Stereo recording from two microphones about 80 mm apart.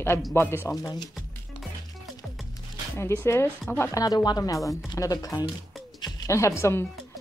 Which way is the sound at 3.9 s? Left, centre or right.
Left.